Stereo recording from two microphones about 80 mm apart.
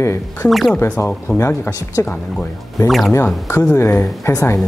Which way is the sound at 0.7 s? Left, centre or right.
Centre.